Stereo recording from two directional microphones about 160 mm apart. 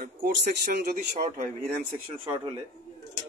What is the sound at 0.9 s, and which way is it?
Speech, 55° right (ahead or behind).